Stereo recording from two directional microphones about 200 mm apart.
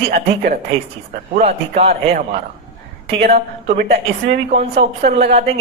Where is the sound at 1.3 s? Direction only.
30° right (ahead or behind).